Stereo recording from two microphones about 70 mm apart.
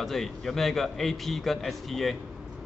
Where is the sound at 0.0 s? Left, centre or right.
Centre.